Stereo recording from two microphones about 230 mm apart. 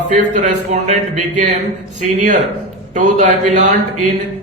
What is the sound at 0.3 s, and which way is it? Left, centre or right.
Speech, right.